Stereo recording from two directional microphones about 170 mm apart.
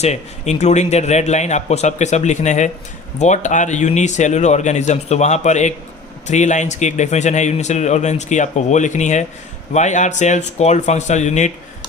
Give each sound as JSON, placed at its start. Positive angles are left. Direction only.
{"t": 0.0, "sound": "a man's voice", "side_deg": 40}